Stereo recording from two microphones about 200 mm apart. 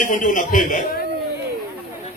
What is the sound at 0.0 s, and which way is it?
A man's voice, 40° left (ahead or behind).